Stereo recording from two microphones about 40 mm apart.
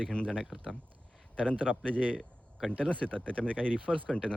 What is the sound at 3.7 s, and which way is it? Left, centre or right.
Speech, right.